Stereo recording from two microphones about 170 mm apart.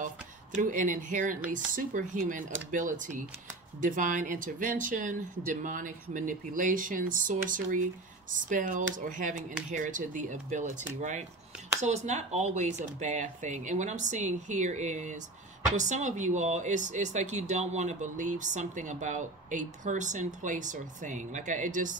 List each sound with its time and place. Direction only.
0.6 s speech: 50° right (ahead or behind)